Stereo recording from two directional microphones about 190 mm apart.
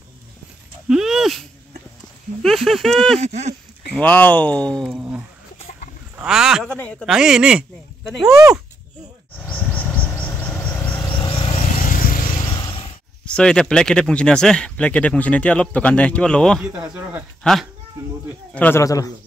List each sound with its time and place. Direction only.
0.8 s a sound: 5° right (ahead or behind)
2.4 s speech: centre (ahead or behind)
3.2 s speech: 35° right (ahead or behind)
3.9 s speech: 10° left (ahead or behind)
9.4 s vehicle: 10° left (ahead or behind)
11.1 s insect: 30° left (ahead or behind); by 12.4 s 45° left (ahead or behind)
12.5 s a sound: 25° left (ahead or behind)
13.2 s speech: 5° left (ahead or behind)
16.7 s speech: 15° right (ahead or behind)
17.4 s speech: centre (ahead or behind); by 19.1 s 20° left (ahead or behind)